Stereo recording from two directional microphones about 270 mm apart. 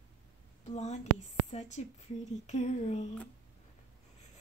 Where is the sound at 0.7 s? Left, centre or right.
Left.